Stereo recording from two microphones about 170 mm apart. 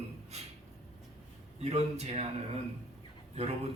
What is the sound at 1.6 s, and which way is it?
Speech, 40° right (ahead or behind).